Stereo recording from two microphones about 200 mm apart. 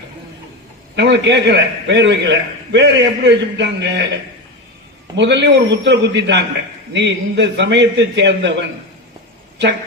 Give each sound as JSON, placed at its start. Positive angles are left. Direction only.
{"t": 0.9, "sound": "a man's voice", "side_deg": -60}
{"t": 5.1, "sound": "a man's voice", "side_deg": -60}